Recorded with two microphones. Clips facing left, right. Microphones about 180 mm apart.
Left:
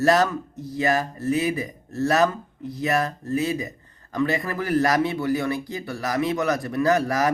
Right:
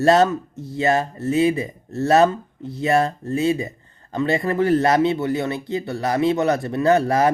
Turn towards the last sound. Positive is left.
turn(degrees=-25)  # may be behind; listen again after turning